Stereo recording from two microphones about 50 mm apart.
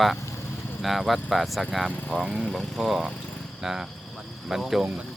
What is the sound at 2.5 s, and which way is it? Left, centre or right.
Speech, centre.